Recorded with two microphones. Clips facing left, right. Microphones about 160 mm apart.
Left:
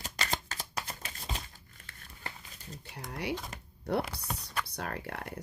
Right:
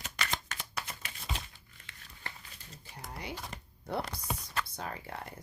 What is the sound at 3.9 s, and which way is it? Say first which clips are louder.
Speech: left 4 dB; 70° left (ahead or behind).